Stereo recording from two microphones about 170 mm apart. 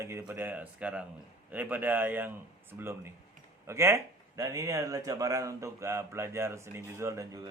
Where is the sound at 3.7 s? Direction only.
15° right (ahead or behind).